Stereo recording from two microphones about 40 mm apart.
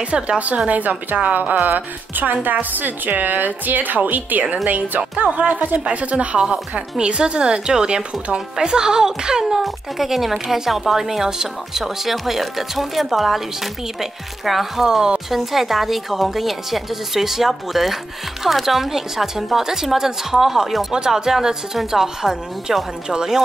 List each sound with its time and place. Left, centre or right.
0.0 s a woman's voice: right
5.9 s a woman's voice: right; by 13.4 s centre
14.4 s speech: centre